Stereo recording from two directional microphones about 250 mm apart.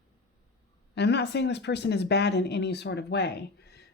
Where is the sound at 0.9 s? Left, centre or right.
Left.